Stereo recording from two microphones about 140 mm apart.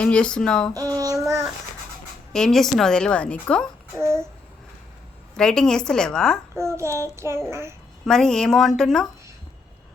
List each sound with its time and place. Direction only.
0.0 s speech: 5° left (ahead or behind)
0.7 s child singing: 25° right (ahead or behind)
2.3 s speech: 5° left (ahead or behind)
5.4 s speech: 5° left (ahead or behind)
6.6 s child singing: 20° right (ahead or behind)
8.0 s speech: 5° left (ahead or behind)